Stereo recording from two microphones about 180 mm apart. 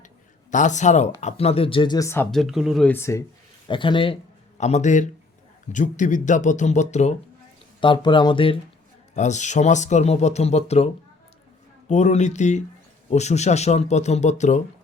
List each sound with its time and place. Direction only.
0.5 s speech: 45° left (ahead or behind); by 2.2 s 15° left (ahead or behind)
2.3 s speech: centre (ahead or behind); by 3.2 s 15° left (ahead or behind)
3.7 s a man's voice: 25° left (ahead or behind)
7.8 s speech: 25° left (ahead or behind)
9.1 s speech: 40° left (ahead or behind)
11.9 s speech: 40° left (ahead or behind)